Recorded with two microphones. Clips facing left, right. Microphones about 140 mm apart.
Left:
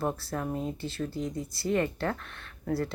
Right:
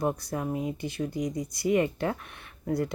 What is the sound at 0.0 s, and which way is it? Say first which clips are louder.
Speech: right 2 dB; 15° right (ahead or behind).